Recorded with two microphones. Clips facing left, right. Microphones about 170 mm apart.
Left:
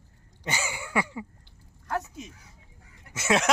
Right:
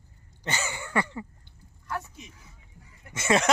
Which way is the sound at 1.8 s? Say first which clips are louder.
Left 4 dB; 45° left (ahead or behind).